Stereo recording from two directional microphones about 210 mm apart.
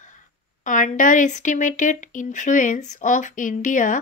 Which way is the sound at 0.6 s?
35° left (ahead or behind).